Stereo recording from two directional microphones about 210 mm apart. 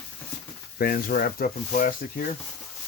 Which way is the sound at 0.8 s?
45° left (ahead or behind).